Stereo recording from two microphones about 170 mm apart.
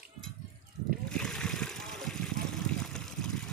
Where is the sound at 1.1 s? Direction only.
5° left (ahead or behind).